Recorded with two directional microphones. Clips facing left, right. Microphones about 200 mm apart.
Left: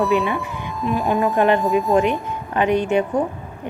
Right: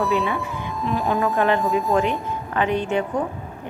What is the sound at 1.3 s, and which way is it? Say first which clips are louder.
Speech: left 3 dB; 20° left (ahead or behind).